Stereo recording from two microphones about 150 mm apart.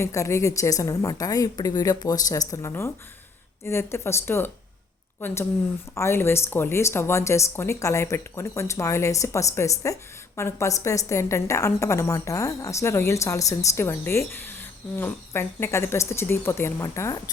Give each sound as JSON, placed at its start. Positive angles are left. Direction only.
{"t": 0.0, "sound": "speech", "side_deg": 20}